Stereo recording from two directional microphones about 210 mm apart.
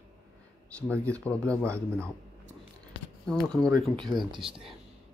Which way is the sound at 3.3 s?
5° left (ahead or behind).